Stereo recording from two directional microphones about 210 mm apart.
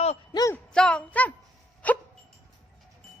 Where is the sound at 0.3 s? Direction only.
15° left (ahead or behind).